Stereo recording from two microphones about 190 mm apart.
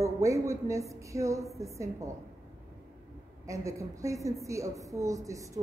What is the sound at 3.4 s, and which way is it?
A woman's voice, 15° right (ahead or behind).